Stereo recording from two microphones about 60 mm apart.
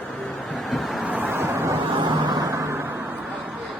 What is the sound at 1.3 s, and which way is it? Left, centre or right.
Vehicle, right.